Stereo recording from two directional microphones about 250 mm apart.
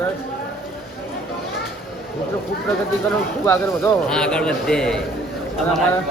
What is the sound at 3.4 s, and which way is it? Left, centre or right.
A man's voice, centre.